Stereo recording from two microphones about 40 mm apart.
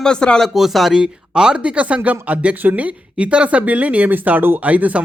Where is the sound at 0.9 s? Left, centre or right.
Centre.